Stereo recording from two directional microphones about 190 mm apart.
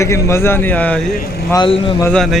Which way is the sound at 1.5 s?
25° left (ahead or behind).